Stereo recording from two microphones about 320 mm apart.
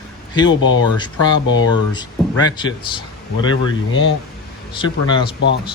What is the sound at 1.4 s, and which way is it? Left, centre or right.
Speech, left.